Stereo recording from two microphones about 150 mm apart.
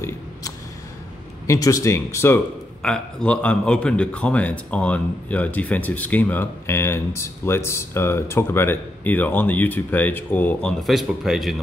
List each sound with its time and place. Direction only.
1.5 s speech: 20° left (ahead or behind)
2.8 s speech: 5° left (ahead or behind)